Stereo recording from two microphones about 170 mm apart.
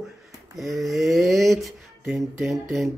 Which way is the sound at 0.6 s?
Centre (ahead or behind).